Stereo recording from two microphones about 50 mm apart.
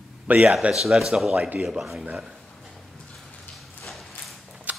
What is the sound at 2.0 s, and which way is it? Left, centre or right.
Speech, right.